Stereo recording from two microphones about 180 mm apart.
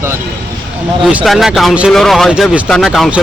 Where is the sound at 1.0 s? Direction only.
5° right (ahead or behind).